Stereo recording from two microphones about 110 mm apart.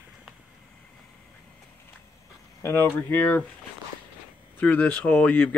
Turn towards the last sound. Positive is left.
turn(degrees=15)  # may be behind; listen again after turning